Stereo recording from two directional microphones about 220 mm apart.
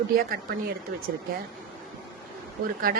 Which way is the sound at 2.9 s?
40° right (ahead or behind).